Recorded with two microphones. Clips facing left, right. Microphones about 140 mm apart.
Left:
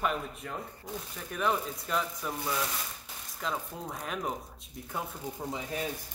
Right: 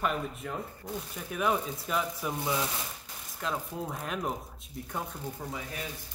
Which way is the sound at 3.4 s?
Centre (ahead or behind).